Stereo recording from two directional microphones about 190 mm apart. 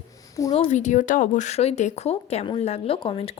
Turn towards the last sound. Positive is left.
turn(degrees=30)  # may be behind; listen again after turning